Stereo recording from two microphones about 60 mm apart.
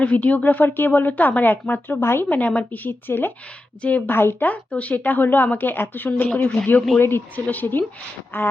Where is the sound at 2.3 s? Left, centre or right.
Left.